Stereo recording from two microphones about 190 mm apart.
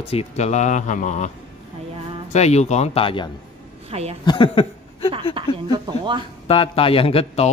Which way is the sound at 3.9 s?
30° right (ahead or behind).